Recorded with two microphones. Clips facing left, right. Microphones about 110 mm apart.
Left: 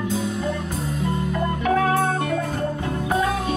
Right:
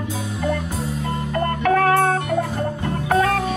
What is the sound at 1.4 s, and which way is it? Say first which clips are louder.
Music: right 4 dB; 60° right (ahead or behind).